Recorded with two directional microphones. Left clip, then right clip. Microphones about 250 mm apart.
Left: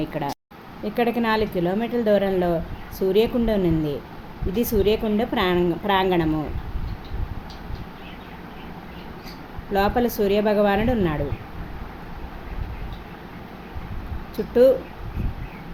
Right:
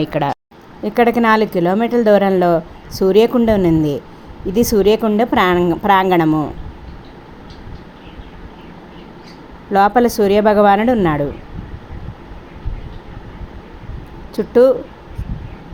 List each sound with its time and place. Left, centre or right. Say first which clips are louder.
0.0 s a woman's voice: right 9 dB; right
9.7 s a woman's voice: right 9 dB; right
14.3 s a woman's voice: right 6 dB; right